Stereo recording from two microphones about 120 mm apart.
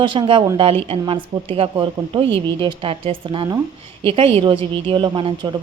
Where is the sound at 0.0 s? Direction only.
45° right (ahead or behind).